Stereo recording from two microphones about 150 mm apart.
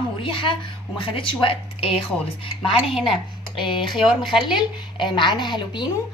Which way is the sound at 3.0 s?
Centre (ahead or behind).